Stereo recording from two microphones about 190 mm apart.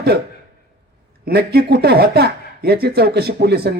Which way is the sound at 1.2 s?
55° right (ahead or behind).